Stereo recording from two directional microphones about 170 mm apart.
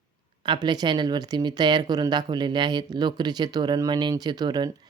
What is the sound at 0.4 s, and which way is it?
Speech, 25° right (ahead or behind).